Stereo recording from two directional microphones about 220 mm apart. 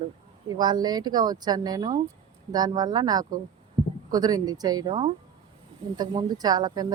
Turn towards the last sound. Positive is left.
turn(degrees=-15)  # may be behind; listen again after turning